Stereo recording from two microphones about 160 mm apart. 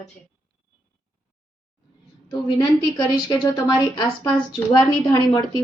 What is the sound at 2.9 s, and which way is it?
A woman's voice, 25° left (ahead or behind).